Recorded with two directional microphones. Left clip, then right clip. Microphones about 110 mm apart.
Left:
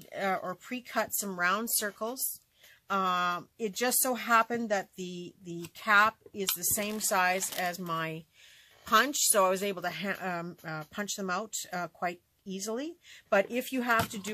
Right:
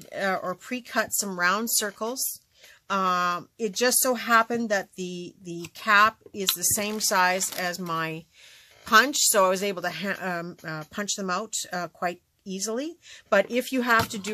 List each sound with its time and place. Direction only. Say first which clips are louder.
0.0 s speech: right 5 dB; 25° right (ahead or behind)